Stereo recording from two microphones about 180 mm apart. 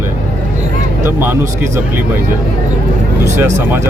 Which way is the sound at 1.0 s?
10° right (ahead or behind).